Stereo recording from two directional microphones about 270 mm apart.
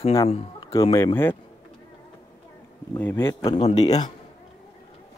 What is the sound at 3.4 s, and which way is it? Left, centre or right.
Speech, left.